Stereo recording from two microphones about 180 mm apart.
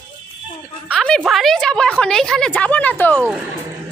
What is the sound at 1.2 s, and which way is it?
A woman's voice, centre (ahead or behind).